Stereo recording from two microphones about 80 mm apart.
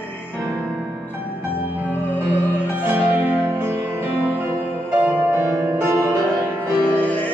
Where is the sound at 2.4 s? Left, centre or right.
Right.